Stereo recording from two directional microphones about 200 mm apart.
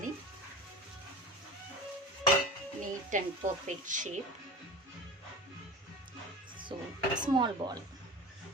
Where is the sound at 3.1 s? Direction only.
40° right (ahead or behind).